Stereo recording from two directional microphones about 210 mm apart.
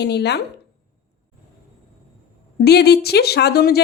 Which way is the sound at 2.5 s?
50° left (ahead or behind).